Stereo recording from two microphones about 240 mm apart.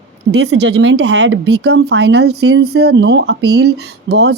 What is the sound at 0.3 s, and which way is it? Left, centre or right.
Speech, right.